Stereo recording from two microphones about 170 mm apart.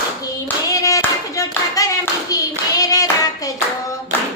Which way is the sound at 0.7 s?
20° left (ahead or behind).